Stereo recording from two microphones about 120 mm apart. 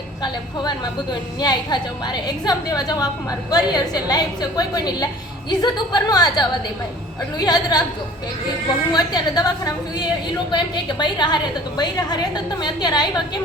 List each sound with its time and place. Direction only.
1.4 s a woman's voice: 35° left (ahead or behind)
8.9 s a woman's voice: 35° left (ahead or behind)